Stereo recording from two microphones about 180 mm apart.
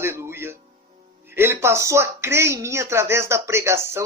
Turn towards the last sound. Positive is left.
turn(degrees=-15)  # may be behind; listen again after turning